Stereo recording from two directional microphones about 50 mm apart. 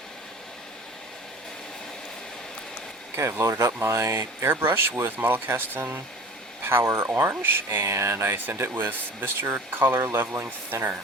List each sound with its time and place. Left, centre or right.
3.2 s speech: right
4.6 s speech: right
10.1 s speech: right
10.7 s speech: right